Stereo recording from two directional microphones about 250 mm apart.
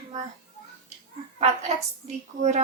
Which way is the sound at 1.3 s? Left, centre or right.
Right.